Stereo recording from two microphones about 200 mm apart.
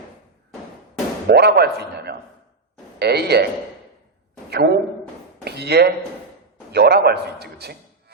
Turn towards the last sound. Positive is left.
turn(degrees=-55)  # may be behind; listen again after turning